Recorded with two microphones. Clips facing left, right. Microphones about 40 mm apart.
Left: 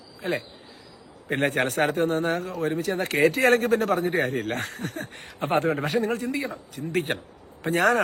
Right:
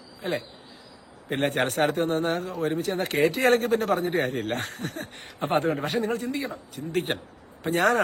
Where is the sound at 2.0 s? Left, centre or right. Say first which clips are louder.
Left 1 dB; right.